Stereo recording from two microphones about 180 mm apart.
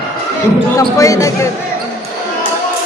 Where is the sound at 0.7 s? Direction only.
20° left (ahead or behind).